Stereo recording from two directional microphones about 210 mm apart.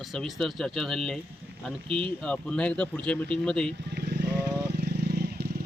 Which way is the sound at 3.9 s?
50° right (ahead or behind).